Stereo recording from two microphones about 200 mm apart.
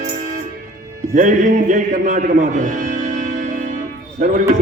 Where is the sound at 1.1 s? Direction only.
40° right (ahead or behind).